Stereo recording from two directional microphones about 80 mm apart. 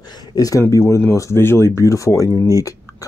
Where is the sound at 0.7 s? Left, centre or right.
Left.